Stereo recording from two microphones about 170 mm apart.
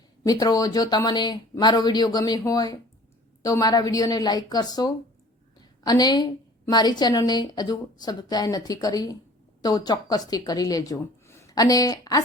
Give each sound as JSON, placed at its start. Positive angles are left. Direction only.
{"t": 0.3, "sound": "a woman's voice", "side_deg": 20}